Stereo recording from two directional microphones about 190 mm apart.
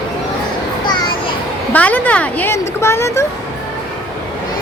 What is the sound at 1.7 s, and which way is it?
Speech, 10° left (ahead or behind).